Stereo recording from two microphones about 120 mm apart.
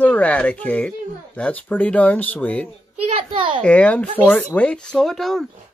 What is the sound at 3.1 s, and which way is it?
Speech, 45° right (ahead or behind).